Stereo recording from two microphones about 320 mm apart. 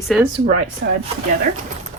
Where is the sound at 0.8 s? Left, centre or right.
Right.